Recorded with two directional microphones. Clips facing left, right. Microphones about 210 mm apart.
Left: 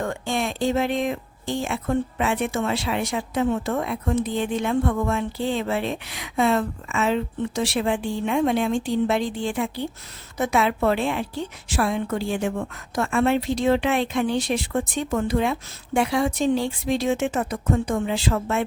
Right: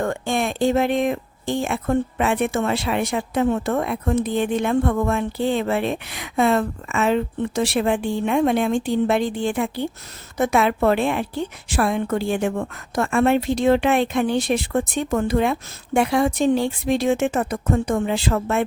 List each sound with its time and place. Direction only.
0.0 s speech: 55° right (ahead or behind)